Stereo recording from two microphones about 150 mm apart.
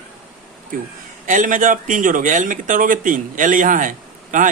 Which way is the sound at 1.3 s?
60° right (ahead or behind).